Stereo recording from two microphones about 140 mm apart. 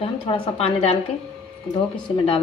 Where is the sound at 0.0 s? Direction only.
40° left (ahead or behind).